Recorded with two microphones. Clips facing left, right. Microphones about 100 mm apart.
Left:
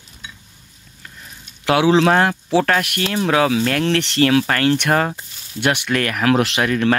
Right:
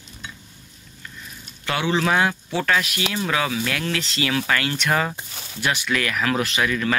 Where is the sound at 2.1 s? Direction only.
50° left (ahead or behind).